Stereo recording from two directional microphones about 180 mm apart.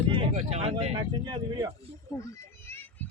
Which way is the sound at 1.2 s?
25° right (ahead or behind).